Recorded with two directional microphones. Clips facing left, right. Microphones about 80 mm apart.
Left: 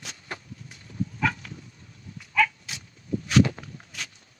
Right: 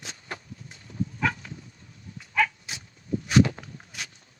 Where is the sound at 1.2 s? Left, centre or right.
Centre.